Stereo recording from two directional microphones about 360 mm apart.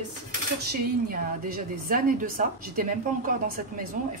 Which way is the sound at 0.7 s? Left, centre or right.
Right.